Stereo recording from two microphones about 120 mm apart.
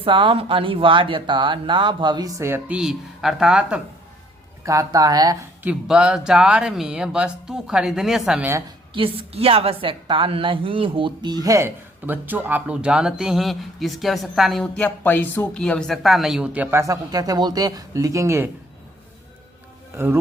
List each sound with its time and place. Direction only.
0.0 s speech: 45° right (ahead or behind)
2.4 s speech: 20° right (ahead or behind)
2.7 s speech: 5° right (ahead or behind)
4.6 s speech: 25° right (ahead or behind)
5.6 s speech: 5° right (ahead or behind)
8.9 s a woman's voice: 50° right (ahead or behind); by 16.6 s 10° right (ahead or behind)
16.7 s speech: 25° right (ahead or behind)